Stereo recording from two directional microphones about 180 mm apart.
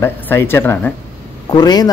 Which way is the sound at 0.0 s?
15° left (ahead or behind).